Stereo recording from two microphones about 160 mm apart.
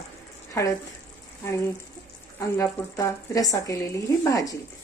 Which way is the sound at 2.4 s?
20° left (ahead or behind).